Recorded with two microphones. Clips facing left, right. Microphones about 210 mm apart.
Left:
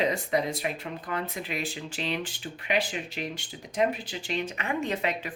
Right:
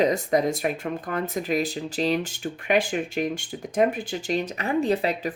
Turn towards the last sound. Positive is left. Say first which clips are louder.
# right 6 dB
turn(degrees=-35)  # may be behind; listen again after turning